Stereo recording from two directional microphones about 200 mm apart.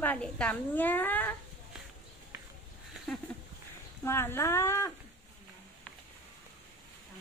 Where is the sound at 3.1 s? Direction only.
5° left (ahead or behind).